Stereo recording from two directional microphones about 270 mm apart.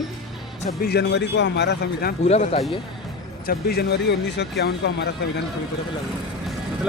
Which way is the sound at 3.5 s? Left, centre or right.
Left.